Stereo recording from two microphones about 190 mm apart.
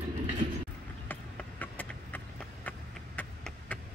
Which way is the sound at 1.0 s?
10° left (ahead or behind).